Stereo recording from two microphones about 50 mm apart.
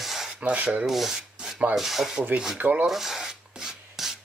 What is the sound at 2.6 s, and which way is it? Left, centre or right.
Speech, right.